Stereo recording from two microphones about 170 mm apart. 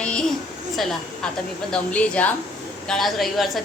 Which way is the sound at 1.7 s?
5° left (ahead or behind).